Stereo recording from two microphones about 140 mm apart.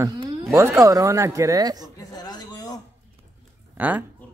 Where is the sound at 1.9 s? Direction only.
25° left (ahead or behind).